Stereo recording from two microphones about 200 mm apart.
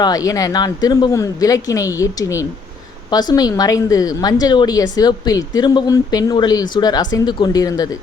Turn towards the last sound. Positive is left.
turn(degrees=20)  # may be behind; listen again after turning